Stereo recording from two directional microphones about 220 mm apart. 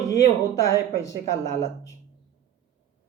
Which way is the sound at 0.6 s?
15° left (ahead or behind).